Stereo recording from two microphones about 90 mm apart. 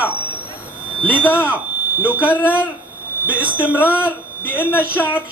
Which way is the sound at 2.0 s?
15° right (ahead or behind).